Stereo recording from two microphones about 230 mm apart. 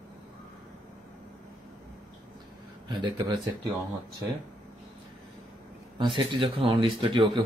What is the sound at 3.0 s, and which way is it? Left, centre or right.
Speech, centre.